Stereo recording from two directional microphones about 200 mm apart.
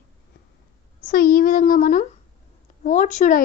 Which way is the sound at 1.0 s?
45° left (ahead or behind).